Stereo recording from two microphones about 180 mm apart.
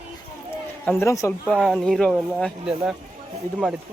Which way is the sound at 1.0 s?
15° left (ahead or behind).